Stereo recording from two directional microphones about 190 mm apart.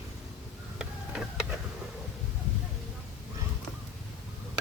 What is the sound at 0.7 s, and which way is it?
Tick-tock, 5° right (ahead or behind).